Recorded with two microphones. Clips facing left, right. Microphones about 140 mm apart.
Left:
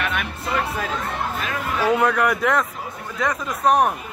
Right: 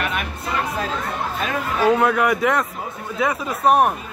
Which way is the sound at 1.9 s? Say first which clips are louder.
Right 2 dB; centre (ahead or behind).